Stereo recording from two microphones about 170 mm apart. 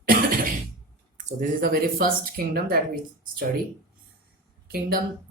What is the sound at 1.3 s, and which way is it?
Speech, 55° right (ahead or behind).